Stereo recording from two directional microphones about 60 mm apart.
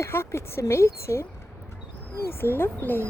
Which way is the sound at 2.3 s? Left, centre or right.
Left.